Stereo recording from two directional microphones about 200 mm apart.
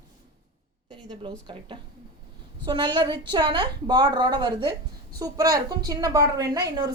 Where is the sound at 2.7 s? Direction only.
20° right (ahead or behind).